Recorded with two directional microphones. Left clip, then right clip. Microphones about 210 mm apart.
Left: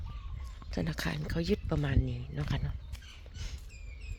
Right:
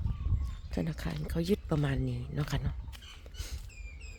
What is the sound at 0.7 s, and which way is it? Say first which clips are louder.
Speech: left 2 dB; 5° right (ahead or behind).